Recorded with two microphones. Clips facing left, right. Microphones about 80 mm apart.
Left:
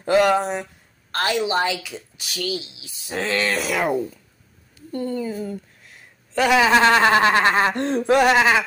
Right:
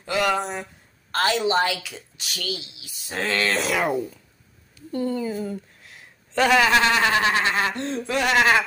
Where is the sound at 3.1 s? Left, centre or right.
Centre.